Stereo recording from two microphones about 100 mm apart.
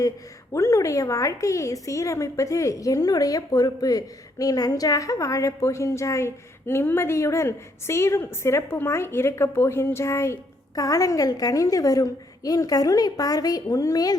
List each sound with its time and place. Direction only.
0.5 s a woman's voice: 30° left (ahead or behind)